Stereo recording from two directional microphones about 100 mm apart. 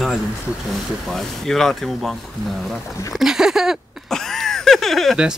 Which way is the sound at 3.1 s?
5° right (ahead or behind).